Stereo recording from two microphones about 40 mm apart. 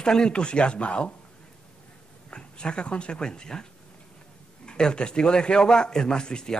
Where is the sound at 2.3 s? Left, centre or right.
Left.